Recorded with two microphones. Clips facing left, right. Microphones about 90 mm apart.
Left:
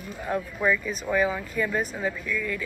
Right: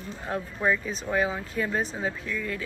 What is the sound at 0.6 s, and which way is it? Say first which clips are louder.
Speech: even; 30° right (ahead or behind).